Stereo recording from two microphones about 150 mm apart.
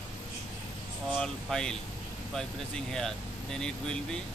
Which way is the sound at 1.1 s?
5° left (ahead or behind).